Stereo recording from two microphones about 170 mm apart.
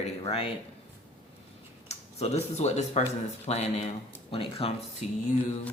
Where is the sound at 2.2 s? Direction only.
40° left (ahead or behind).